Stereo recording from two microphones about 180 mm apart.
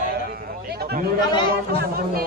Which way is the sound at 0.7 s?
60° right (ahead or behind).